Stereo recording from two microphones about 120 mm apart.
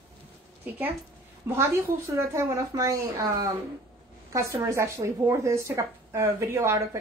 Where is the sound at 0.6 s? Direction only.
15° right (ahead or behind).